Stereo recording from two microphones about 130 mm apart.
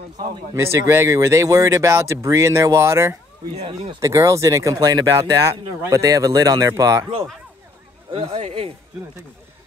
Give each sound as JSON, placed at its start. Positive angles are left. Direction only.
{"t": 0.6, "sound": "speech", "side_deg": -20}
{"t": 3.5, "sound": "a man's voice", "side_deg": -50}
{"t": 4.0, "sound": "speech", "side_deg": -25}
{"t": 8.1, "sound": "a man's voice", "side_deg": -50}